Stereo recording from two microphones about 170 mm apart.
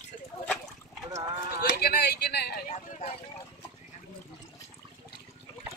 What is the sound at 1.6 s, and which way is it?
Speech, 70° left (ahead or behind).